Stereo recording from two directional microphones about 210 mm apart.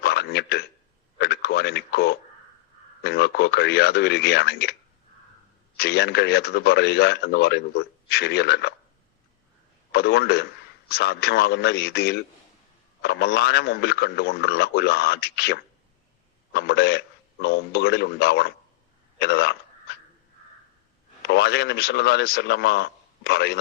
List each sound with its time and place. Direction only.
0.0 s a sound: 50° left (ahead or behind)
1.2 s a man's voice: 50° left (ahead or behind)
5.7 s a man's voice: 50° left (ahead or behind)
9.9 s a man's voice: 50° left (ahead or behind)
21.2 s a man's voice: 50° left (ahead or behind)